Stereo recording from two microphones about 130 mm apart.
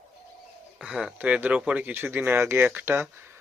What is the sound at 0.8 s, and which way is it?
Speech, 5° right (ahead or behind).